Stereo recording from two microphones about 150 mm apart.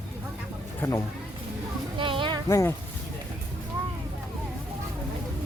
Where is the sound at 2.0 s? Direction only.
35° right (ahead or behind).